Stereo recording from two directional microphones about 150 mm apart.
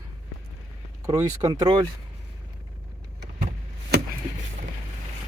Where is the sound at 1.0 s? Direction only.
25° right (ahead or behind).